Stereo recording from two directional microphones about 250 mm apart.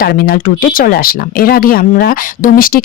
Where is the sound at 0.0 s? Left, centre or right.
Left.